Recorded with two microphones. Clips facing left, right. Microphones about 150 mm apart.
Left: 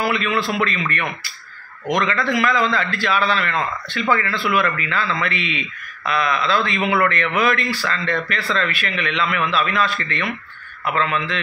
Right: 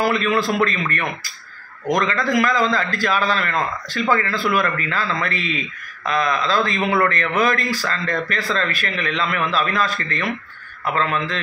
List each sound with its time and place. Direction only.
0.0 s speech: 40° right (ahead or behind)